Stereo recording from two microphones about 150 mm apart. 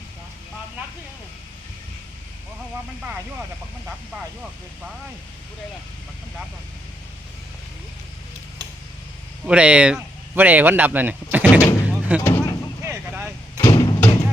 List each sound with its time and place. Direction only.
9.5 s speech: 10° right (ahead or behind)
12.2 s vehicle: 25° left (ahead or behind)
12.8 s vehicle: 15° right (ahead or behind)
13.6 s a sound: 25° left (ahead or behind)